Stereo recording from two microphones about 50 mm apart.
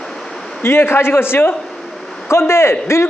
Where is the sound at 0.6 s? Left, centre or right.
Left.